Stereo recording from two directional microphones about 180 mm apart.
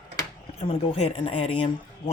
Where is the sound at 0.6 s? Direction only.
30° left (ahead or behind).